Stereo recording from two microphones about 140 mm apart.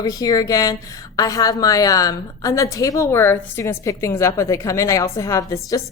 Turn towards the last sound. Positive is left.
turn(degrees=20)  # may be behind; listen again after turning